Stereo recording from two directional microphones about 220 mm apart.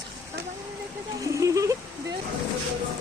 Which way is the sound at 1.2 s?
15° right (ahead or behind).